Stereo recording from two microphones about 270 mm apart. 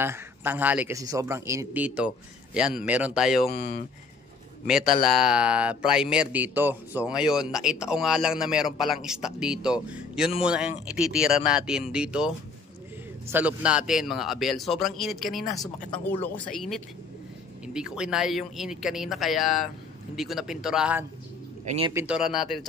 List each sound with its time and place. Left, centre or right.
0.0 s speech: centre
5.0 s speech: centre
13.3 s speech: centre
21.6 s speech: right
21.9 s speech: centre